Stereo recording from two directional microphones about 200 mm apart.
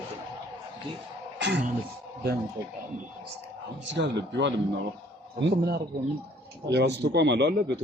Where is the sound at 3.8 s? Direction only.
65° right (ahead or behind).